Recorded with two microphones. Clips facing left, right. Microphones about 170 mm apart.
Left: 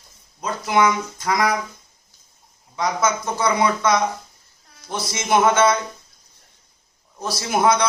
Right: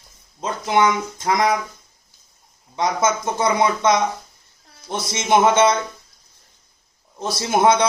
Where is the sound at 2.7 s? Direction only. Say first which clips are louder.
Right 2 dB; 25° right (ahead or behind).